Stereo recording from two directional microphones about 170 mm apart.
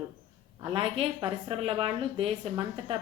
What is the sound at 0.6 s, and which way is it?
A woman's voice, 30° right (ahead or behind).